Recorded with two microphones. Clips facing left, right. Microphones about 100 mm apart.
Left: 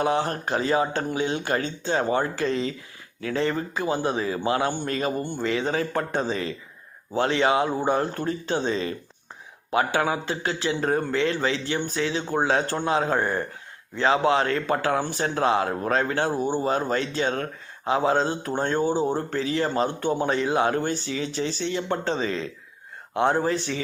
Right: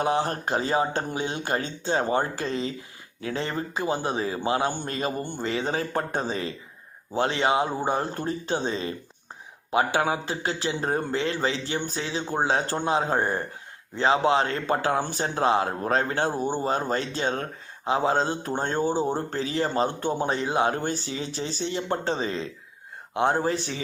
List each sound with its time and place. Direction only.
0.0 s a man's voice: 30° right (ahead or behind)
18.8 s speech: 20° left (ahead or behind)
19.3 s a man's voice: 30° right (ahead or behind)